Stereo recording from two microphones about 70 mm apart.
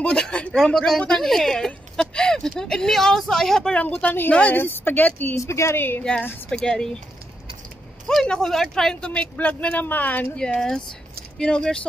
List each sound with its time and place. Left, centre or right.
0.0 s speech: centre
4.0 s speech: left
4.6 s speech: left
5.3 s a woman's voice: left
6.5 s speech: centre
8.1 s speech: centre; by 10.2 s left
10.3 s speech: centre